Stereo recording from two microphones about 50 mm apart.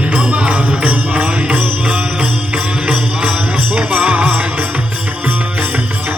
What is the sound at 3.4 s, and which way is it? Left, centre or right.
Music, right.